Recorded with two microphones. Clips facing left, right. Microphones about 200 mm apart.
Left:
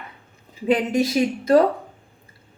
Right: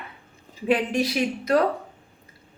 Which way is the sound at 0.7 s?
25° left (ahead or behind).